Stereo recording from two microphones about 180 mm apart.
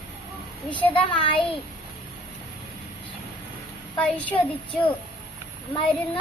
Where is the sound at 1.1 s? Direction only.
30° left (ahead or behind).